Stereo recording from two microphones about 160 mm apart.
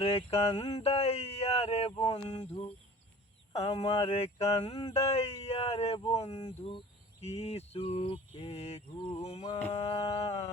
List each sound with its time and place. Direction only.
0.0 s speech: 35° left (ahead or behind)